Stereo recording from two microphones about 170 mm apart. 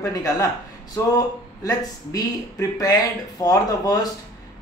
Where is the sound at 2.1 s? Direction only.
20° left (ahead or behind).